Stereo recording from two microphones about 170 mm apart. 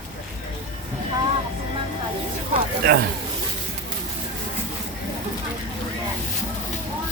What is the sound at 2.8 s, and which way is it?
Speech, 90° right.